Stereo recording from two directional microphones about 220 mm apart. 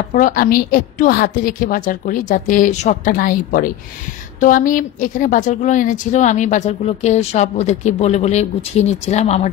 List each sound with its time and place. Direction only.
0.1 s a woman's voice: 40° left (ahead or behind)